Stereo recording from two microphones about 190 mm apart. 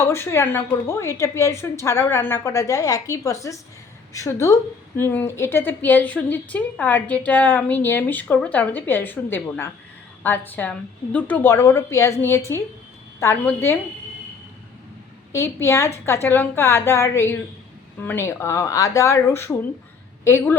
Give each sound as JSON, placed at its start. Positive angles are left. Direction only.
{"t": 0.0, "sound": "a woman's voice", "side_deg": 15}
{"t": 15.3, "sound": "a woman's voice", "side_deg": 15}